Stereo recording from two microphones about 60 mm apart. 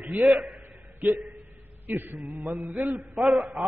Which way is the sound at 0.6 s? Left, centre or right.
Right.